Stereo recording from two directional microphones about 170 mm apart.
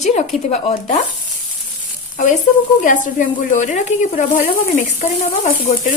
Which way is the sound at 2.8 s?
50° left (ahead or behind).